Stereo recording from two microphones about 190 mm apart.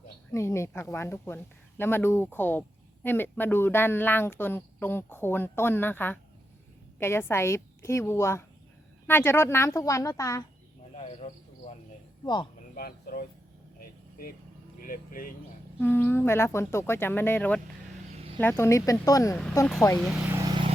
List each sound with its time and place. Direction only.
0.3 s speech: 15° left (ahead or behind)
10.9 s cricket: 35° left (ahead or behind)
12.2 s speech: 25° left (ahead or behind)
12.7 s speech: 50° left (ahead or behind)
13.7 s vehicle: 50° left (ahead or behind)
14.8 s speech: 45° left (ahead or behind)
15.8 s speech: 10° left (ahead or behind)
20.0 s speech: 5° right (ahead or behind)
20.4 s vehicle: 20° right (ahead or behind)